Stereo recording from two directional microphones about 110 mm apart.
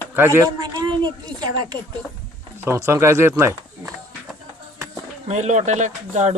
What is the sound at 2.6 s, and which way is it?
Speech, 25° right (ahead or behind).